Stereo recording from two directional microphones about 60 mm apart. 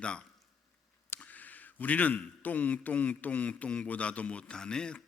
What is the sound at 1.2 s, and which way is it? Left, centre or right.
A man's voice, left.